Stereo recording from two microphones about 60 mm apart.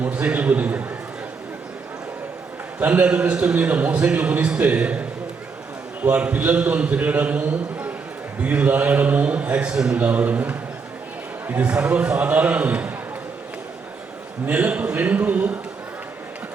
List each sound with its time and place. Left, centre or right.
0.0 s a man's voice: right
2.8 s a man's voice: right
10.0 s a man's voice: right
14.4 s a man's voice: right